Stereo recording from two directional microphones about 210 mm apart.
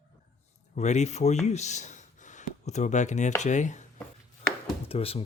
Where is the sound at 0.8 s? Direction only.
35° left (ahead or behind).